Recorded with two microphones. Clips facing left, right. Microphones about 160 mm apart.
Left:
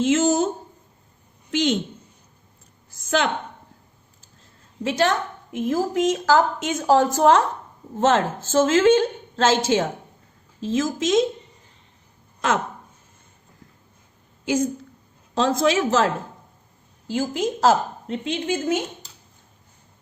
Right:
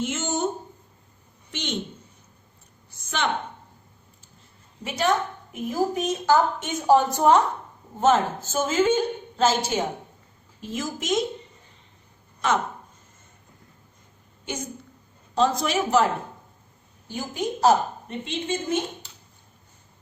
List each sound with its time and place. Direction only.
0.0 s speech: 90° left
1.5 s a woman's voice: 90° left
2.9 s a woman's voice: 90° left
4.8 s a woman's voice: 90° left
15.4 s a woman's voice: 90° left
17.1 s a woman's voice: 90° left